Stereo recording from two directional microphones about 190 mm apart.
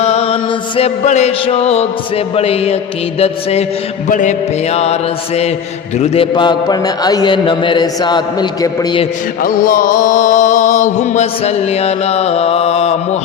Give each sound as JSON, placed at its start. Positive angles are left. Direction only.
{"t": 0.0, "sound": "mantra", "side_deg": 35}
{"t": 4.1, "sound": "mantra", "side_deg": 40}
{"t": 6.0, "sound": "speech", "side_deg": 25}
{"t": 9.4, "sound": "mantra", "side_deg": 45}